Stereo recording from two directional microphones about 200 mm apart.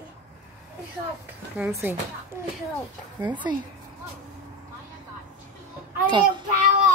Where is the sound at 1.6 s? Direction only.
10° right (ahead or behind).